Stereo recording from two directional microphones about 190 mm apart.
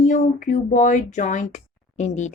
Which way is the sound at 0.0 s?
45° left (ahead or behind).